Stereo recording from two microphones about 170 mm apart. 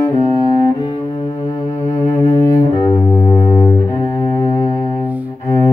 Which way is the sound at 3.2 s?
30° left (ahead or behind).